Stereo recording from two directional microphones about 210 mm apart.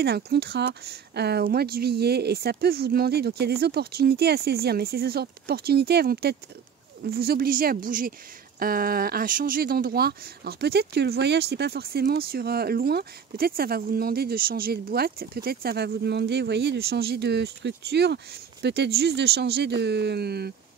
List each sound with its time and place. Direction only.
0.0 s speech: 50° right (ahead or behind)